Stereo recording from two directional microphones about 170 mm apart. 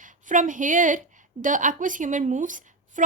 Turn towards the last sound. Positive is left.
turn(degrees=-50)  # may be behind; listen again after turning